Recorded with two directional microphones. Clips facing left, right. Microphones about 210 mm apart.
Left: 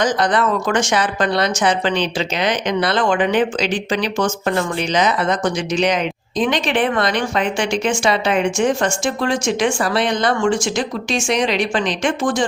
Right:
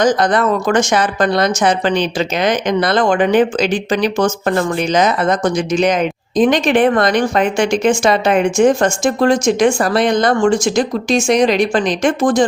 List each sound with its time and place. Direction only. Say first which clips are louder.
0.0 s speech: right 4 dB; 45° right (ahead or behind)